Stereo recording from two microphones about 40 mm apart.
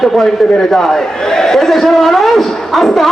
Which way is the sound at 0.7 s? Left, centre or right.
Centre.